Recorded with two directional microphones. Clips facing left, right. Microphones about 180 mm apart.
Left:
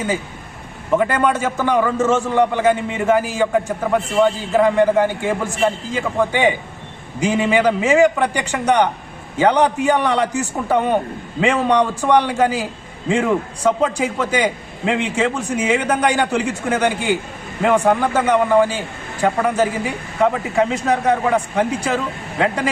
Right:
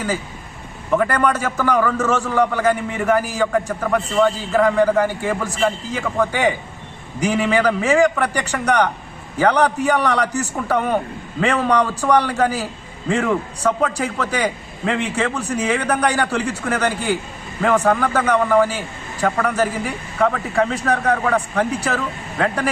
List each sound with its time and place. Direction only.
0.9 s a man's voice: 15° left (ahead or behind)